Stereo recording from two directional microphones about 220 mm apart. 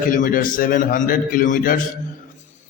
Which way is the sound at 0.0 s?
40° left (ahead or behind).